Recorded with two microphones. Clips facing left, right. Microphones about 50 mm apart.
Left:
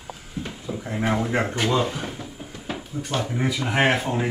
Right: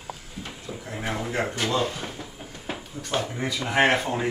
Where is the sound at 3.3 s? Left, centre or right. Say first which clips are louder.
Left 1 dB; centre.